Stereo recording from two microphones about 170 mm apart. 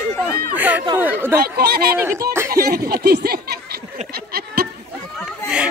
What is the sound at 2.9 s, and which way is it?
Speech, 65° right (ahead or behind).